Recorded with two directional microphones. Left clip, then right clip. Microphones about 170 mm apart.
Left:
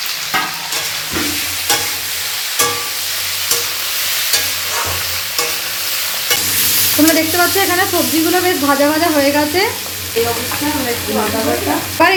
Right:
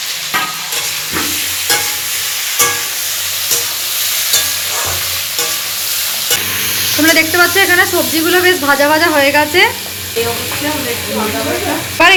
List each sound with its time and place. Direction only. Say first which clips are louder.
7.1 s sizzle: right 4 dB; 10° left (ahead or behind)
12.0 s sizzle: right 4 dB; centre (ahead or behind)